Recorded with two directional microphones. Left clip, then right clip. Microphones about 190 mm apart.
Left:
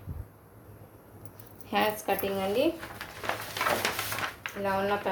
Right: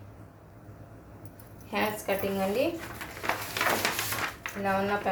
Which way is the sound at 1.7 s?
55° left (ahead or behind).